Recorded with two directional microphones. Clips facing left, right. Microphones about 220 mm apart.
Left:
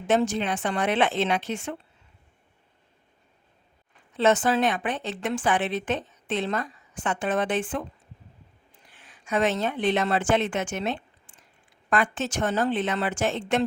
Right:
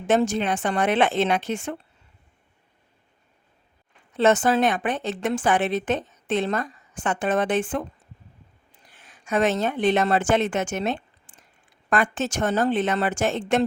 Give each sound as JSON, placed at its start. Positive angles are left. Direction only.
{"t": 0.1, "sound": "a woman's voice", "side_deg": -45}
{"t": 4.2, "sound": "a woman's voice", "side_deg": -45}
{"t": 8.9, "sound": "a woman's voice", "side_deg": -45}